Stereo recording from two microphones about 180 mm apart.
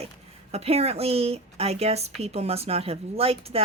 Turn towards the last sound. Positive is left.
turn(degrees=-35)  # may be behind; listen again after turning